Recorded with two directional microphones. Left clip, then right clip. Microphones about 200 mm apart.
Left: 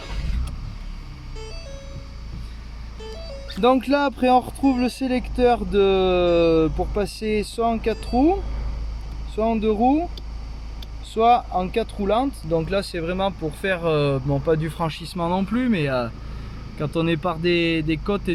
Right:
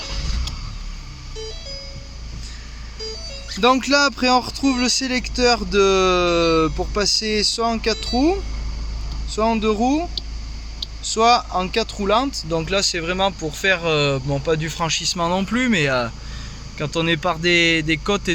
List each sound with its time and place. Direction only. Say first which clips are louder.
3.6 s speech: right 3 dB; centre (ahead or behind)
11.1 s speech: right 1 dB; centre (ahead or behind)